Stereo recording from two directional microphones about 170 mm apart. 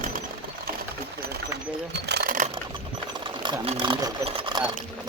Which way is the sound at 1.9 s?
80° right.